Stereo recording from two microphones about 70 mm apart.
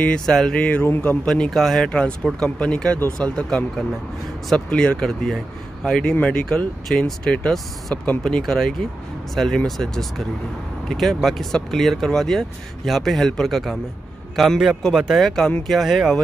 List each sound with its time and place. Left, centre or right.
0.0 s speech: centre
1.2 s speech: centre
1.9 s speech: centre